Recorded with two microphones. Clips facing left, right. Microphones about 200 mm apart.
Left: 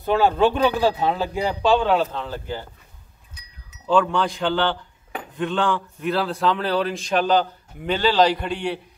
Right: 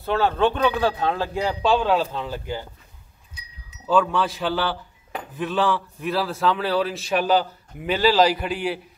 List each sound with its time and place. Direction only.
0.0 s a man's voice: 15° left (ahead or behind); by 2.6 s 15° right (ahead or behind)
3.8 s a man's voice: centre (ahead or behind)